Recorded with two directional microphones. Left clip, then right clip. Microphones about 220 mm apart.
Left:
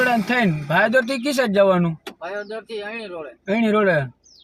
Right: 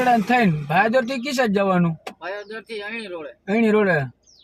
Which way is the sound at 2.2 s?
45° right (ahead or behind).